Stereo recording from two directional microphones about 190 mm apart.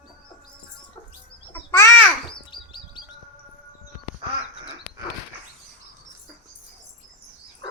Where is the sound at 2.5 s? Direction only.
25° left (ahead or behind).